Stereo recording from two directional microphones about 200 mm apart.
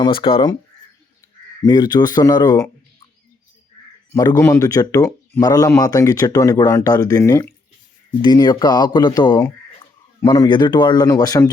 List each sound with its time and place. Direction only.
0.0 s speech: 25° left (ahead or behind)
1.6 s speech: 20° left (ahead or behind)
4.1 s speech: 15° left (ahead or behind)